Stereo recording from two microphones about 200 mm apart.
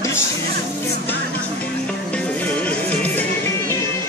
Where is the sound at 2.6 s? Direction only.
10° left (ahead or behind).